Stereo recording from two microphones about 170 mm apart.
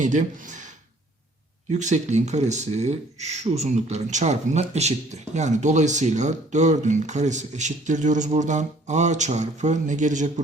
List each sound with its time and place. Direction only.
0.0 s speech: 45° right (ahead or behind)
1.7 s speech: 45° right (ahead or behind)